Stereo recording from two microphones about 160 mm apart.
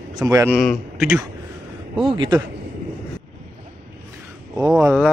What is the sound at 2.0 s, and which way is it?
Speech, 30° right (ahead or behind).